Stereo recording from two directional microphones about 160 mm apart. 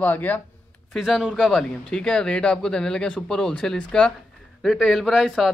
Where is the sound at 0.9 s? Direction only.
5° right (ahead or behind).